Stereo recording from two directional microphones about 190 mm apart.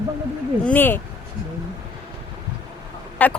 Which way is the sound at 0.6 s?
10° left (ahead or behind).